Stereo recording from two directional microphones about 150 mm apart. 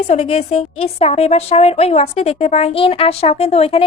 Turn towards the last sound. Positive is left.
turn(degrees=40)  # may be behind; listen again after turning